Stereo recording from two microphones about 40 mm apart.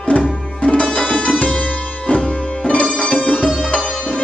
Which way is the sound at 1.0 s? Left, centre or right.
Left.